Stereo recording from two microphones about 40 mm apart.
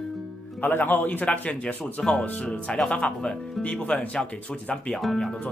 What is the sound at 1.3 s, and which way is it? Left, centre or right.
Speech, left.